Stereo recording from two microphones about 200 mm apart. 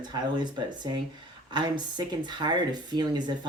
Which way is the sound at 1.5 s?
20° right (ahead or behind).